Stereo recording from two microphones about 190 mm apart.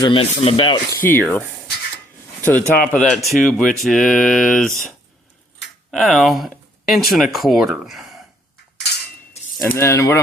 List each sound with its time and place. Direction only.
0.0 s speech: 30° left (ahead or behind)
1.0 s speech: 10° left (ahead or behind)
5.9 s speech: centre (ahead or behind)
9.6 s speech: 15° left (ahead or behind)